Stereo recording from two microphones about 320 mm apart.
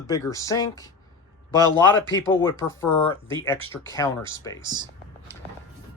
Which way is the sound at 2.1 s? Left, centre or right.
Centre.